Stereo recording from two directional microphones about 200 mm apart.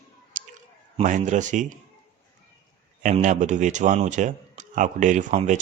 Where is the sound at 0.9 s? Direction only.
35° right (ahead or behind).